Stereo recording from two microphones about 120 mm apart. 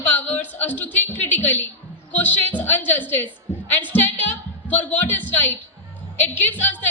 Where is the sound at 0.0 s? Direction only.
15° left (ahead or behind).